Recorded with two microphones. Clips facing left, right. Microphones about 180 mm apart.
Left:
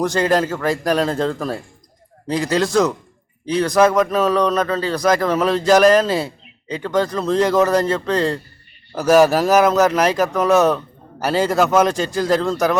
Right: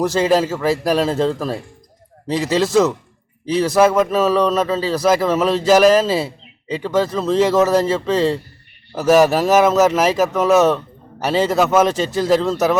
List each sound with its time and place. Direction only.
0.0 s speech: 5° right (ahead or behind)